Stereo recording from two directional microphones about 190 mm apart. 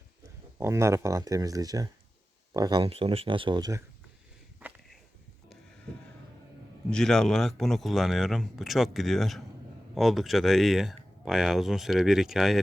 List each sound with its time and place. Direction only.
0.6 s speech: 15° right (ahead or behind)
6.9 s speech: 5° left (ahead or behind)